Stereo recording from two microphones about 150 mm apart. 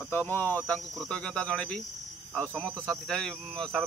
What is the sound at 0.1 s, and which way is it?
Speech, 15° left (ahead or behind).